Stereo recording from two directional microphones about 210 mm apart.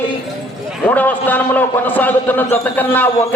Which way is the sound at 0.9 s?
10° left (ahead or behind).